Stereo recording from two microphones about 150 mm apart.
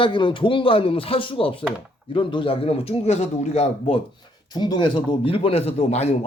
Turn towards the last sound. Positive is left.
turn(degrees=45)  # may be behind; listen again after turning